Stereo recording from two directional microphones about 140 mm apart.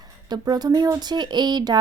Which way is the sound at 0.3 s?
30° right (ahead or behind).